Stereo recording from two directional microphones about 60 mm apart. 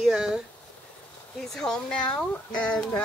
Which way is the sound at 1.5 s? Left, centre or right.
Centre.